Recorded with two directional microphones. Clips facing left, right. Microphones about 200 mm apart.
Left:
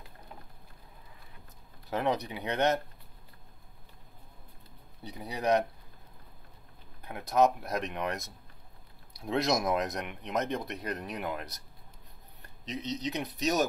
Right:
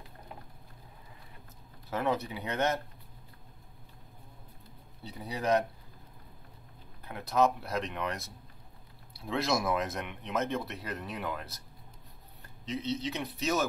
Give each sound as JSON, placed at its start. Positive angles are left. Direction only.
{"t": 1.9, "sound": "speech", "side_deg": 15}
{"t": 5.0, "sound": "speech", "side_deg": 15}
{"t": 7.1, "sound": "speech", "side_deg": 15}
{"t": 12.8, "sound": "speech", "side_deg": 20}